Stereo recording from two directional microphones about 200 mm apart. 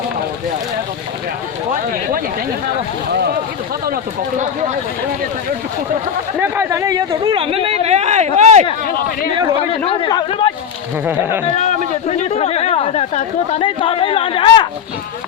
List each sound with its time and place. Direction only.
1.7 s a sound: 45° right (ahead or behind)
3.1 s speech: 55° right (ahead or behind)
6.4 s speech: 15° right (ahead or behind); by 8.6 s 35° right (ahead or behind)
9.8 s speech: 25° left (ahead or behind)
11.0 s speech: 10° right (ahead or behind)
11.4 s speech: 30° left (ahead or behind)